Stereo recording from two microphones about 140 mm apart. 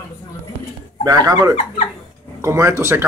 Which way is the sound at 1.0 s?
25° right (ahead or behind).